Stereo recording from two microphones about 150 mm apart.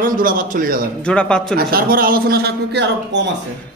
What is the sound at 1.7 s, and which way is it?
Speech, 80° right.